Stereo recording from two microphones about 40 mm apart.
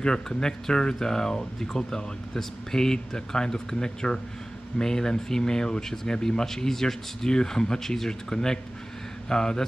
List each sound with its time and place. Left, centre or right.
0.0 s speech: centre